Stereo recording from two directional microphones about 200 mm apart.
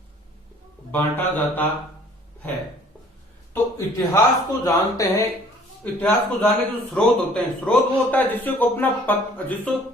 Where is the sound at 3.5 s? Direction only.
15° left (ahead or behind).